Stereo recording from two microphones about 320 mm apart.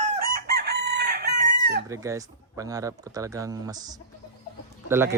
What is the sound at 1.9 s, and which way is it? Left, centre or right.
Speech, centre.